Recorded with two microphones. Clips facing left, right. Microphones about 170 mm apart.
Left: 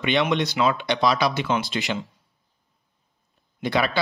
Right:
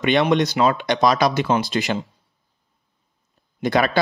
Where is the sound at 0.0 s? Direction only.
45° right (ahead or behind).